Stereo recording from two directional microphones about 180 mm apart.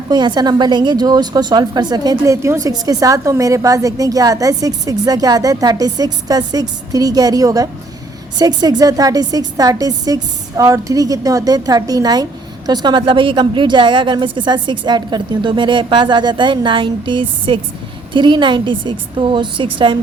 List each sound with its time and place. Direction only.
0.1 s a woman's voice: 25° right (ahead or behind)